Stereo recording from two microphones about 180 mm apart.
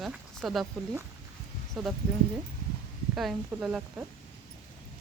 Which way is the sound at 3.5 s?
5° right (ahead or behind).